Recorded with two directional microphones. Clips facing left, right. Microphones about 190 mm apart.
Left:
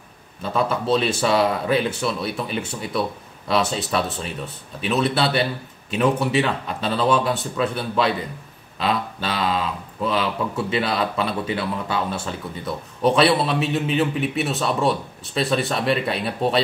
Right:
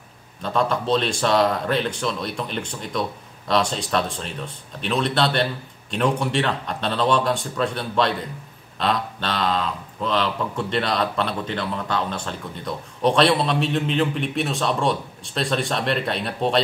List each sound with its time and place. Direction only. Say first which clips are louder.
0.4 s speech: even; 5° left (ahead or behind)